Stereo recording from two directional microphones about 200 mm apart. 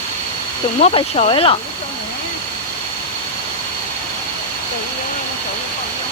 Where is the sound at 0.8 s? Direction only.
30° left (ahead or behind).